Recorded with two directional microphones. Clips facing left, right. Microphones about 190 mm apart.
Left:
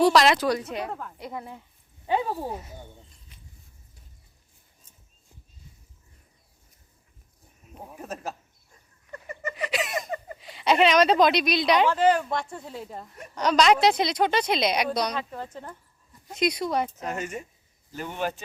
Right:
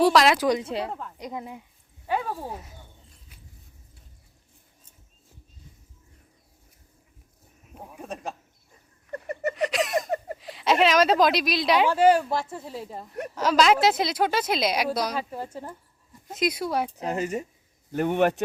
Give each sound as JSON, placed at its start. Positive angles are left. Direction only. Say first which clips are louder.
{"t": 0.0, "sound": "speech", "louder": "even", "side_deg": 0}
{"t": 0.3, "sound": "speech", "louder": "right 2 dB", "side_deg": -20}
{"t": 0.6, "sound": "speech", "louder": "right 3 dB", "side_deg": -30}
{"t": 1.2, "sound": "speech", "louder": "right 1 dB", "side_deg": -15}
{"t": 2.0, "sound": "speech", "louder": "left 2 dB", "side_deg": 20}
{"t": 2.5, "sound": "speech", "louder": "left 3 dB", "side_deg": 0}
{"t": 7.8, "sound": "speech", "louder": "even", "side_deg": 0}
{"t": 9.6, "sound": "a sound", "louder": "right 3 dB", "side_deg": 0}
{"t": 10.3, "sound": "speech", "louder": "left 1 dB", "side_deg": 0}
{"t": 17.1, "sound": "speech", "louder": "right 4 dB", "side_deg": -35}
{"t": 17.9, "sound": "speech", "louder": "right 9 dB", "side_deg": -60}